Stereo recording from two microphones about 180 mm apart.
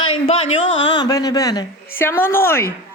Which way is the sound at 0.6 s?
90° left.